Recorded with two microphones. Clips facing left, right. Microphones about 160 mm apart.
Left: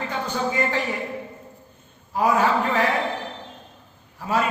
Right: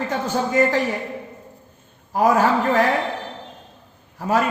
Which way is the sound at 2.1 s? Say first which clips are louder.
Right 3 dB; 45° right (ahead or behind).